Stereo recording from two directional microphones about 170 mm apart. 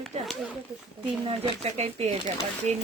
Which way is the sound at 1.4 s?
40° right (ahead or behind).